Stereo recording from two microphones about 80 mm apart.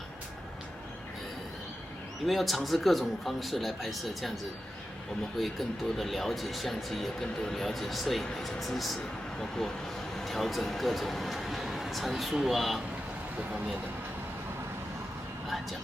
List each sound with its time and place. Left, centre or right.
2.2 s speech: centre
5.4 s speech: centre
10.2 s speech: centre